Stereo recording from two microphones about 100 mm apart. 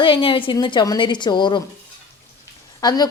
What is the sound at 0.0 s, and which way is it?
A woman's voice, 60° left (ahead or behind).